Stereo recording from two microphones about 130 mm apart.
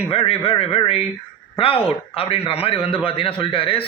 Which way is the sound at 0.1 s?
50° left (ahead or behind).